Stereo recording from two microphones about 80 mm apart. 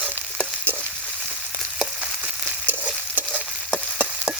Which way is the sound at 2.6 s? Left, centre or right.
Right.